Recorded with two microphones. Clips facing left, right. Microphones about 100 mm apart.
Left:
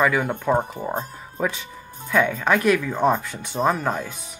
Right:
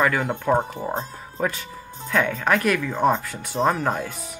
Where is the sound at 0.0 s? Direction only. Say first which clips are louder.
Left 1 dB; 10° left (ahead or behind).